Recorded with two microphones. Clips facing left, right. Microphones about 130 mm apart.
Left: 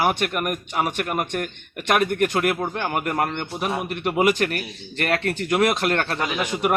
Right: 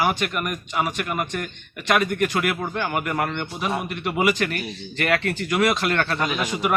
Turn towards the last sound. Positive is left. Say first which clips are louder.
# even
turn(degrees=5)  # may be behind; listen again after turning